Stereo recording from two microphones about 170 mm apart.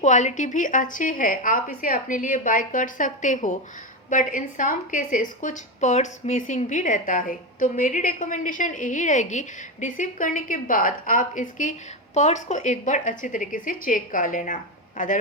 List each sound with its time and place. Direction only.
0.0 s a woman's voice: 45° left (ahead or behind)